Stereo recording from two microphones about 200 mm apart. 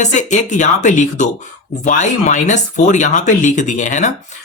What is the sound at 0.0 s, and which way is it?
Speech, 35° left (ahead or behind).